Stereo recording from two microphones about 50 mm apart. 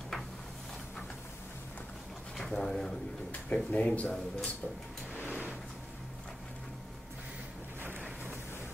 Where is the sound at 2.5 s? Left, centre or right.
Centre.